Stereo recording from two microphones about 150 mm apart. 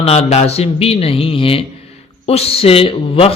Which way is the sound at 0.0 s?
45° left (ahead or behind).